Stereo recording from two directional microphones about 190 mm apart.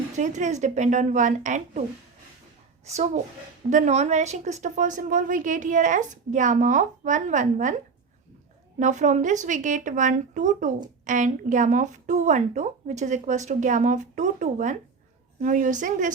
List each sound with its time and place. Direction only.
0.2 s speech: 40° right (ahead or behind)
2.8 s speech: 35° right (ahead or behind)
8.8 s speech: 40° right (ahead or behind)